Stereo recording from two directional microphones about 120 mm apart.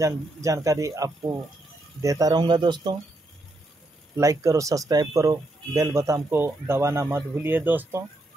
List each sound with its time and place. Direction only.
0.0 s speech: 25° right (ahead or behind)
4.2 s speech: 25° right (ahead or behind)